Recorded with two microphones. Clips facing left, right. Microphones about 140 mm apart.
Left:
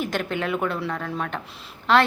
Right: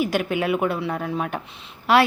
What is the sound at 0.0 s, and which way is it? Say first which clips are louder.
A woman's voice: right 4 dB; 10° right (ahead or behind).